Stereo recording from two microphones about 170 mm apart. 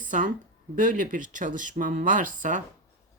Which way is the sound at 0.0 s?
50° right (ahead or behind).